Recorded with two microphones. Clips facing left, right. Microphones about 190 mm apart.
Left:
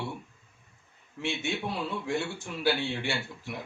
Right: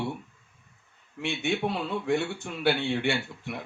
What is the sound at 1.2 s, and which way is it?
Speech, 60° right (ahead or behind).